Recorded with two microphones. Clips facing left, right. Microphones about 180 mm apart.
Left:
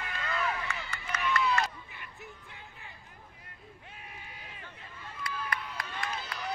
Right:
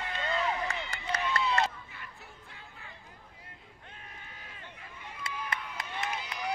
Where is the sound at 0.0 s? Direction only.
25° right (ahead or behind).